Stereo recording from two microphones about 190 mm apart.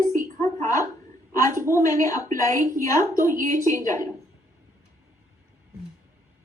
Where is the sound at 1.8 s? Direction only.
15° left (ahead or behind).